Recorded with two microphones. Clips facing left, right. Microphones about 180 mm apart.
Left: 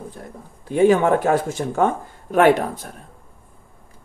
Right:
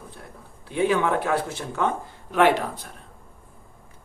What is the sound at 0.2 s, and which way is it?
Speech, 45° left (ahead or behind).